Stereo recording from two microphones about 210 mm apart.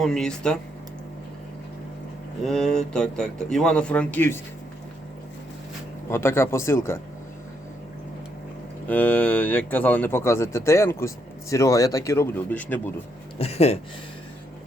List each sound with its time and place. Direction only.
0.0 s speech: centre (ahead or behind)
2.4 s speech: centre (ahead or behind)
6.1 s speech: 10° left (ahead or behind)
8.9 s speech: 5° left (ahead or behind)
13.4 s speech: 30° left (ahead or behind)